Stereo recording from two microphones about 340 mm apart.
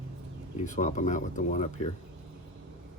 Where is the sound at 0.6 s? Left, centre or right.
Left.